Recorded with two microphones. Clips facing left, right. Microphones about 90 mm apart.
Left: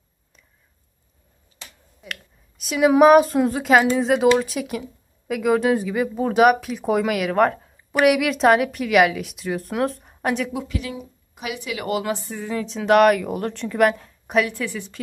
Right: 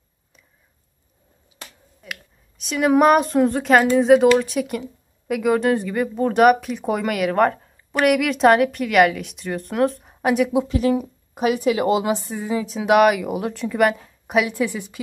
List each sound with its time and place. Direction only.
2.0 s speech: centre (ahead or behind)
10.5 s speech: 25° right (ahead or behind)
10.8 s a woman's voice: 40° right (ahead or behind); by 15.0 s 15° right (ahead or behind)